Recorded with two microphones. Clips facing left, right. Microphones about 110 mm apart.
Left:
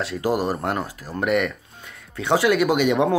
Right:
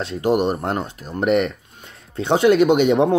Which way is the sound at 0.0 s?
25° right (ahead or behind).